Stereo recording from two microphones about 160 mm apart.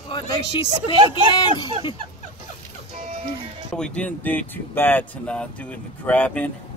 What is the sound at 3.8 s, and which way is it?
Speech, 10° left (ahead or behind).